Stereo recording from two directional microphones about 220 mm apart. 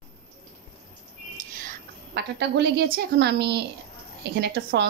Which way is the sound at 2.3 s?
50° right (ahead or behind).